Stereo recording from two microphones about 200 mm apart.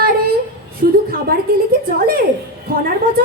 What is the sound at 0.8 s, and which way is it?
A woman's voice, 45° right (ahead or behind).